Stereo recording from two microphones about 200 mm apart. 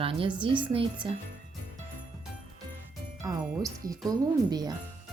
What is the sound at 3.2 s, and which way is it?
Speech, 20° right (ahead or behind).